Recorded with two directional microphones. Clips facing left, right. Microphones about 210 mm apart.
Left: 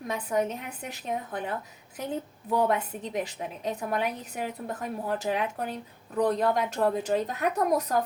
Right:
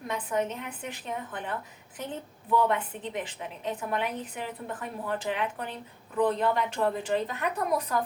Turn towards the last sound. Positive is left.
turn(degrees=40)  # may be behind; listen again after turning